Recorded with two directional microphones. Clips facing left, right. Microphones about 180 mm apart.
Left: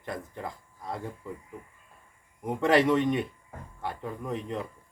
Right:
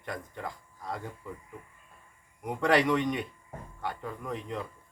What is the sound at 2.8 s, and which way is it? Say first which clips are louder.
A man's voice: left 3 dB; 25° left (ahead or behind).